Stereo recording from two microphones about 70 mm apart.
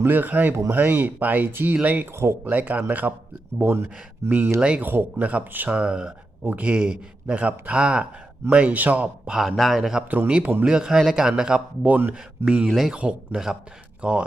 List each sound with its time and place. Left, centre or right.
0.0 s speech: right
3.6 s speech: right
5.3 s speech: centre
6.4 s speech: right
9.6 s a man's voice: centre
10.1 s speech: centre
11.9 s speech: right
12.5 s a man's voice: centre